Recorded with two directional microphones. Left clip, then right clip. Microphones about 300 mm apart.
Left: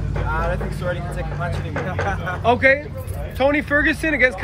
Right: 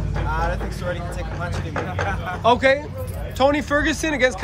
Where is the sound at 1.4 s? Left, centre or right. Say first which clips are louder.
Even; centre.